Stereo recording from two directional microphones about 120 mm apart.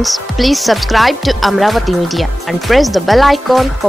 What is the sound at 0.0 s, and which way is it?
Speech, centre (ahead or behind).